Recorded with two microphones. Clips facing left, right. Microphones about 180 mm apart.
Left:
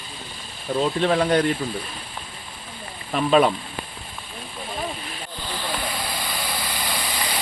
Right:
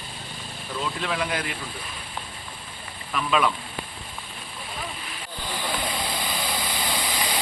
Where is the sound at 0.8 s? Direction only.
35° left (ahead or behind).